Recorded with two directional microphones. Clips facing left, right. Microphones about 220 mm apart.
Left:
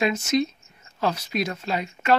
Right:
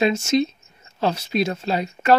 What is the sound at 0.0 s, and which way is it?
Speech, 25° right (ahead or behind).